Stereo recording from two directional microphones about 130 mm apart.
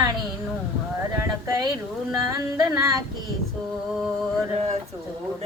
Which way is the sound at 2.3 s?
25° right (ahead or behind).